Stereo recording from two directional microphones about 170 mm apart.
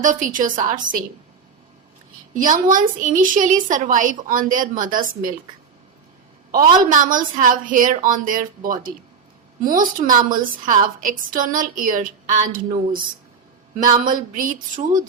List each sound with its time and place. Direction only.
0.0 s a woman's voice: 50° right (ahead or behind)
2.3 s a woman's voice: 50° right (ahead or behind)
6.5 s a woman's voice: 55° right (ahead or behind)